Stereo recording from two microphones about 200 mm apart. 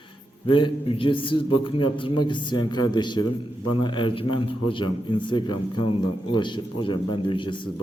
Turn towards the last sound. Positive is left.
turn(degrees=25)  # may be behind; listen again after turning